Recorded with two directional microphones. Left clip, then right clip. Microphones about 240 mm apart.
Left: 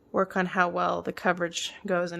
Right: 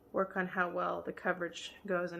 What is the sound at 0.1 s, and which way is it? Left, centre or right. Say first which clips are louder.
Speech: left 8 dB; left.